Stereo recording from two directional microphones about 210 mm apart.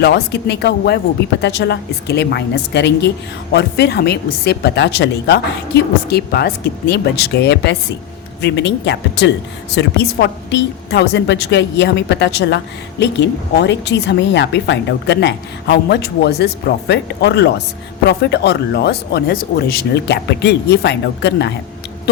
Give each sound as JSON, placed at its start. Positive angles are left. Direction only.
{"t": 0.0, "sound": "a woman's voice", "side_deg": 55}